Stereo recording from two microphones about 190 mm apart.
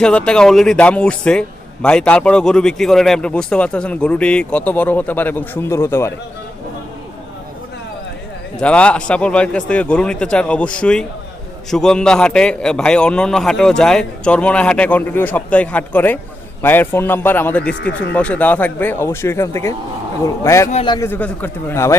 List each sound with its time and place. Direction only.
0.0 s a man's voice: 5° left (ahead or behind)
8.6 s a man's voice: 5° left (ahead or behind); by 21.1 s 20° left (ahead or behind)
21.1 s speech: 10° left (ahead or behind)